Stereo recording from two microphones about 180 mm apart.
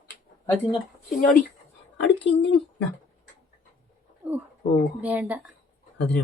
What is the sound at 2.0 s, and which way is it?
Speech, 80° left.